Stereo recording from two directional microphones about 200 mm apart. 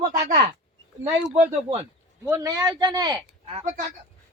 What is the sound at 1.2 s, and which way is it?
Speech, 5° right (ahead or behind).